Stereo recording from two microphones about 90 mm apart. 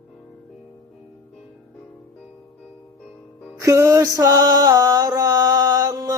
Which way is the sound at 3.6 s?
35° right (ahead or behind).